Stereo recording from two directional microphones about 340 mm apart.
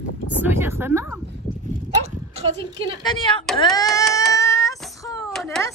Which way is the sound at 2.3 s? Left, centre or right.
Centre.